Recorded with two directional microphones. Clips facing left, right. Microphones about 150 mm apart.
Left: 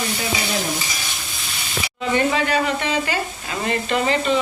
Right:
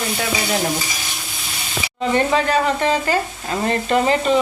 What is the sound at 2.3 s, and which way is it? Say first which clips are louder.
Speech: right 3 dB; 40° right (ahead or behind).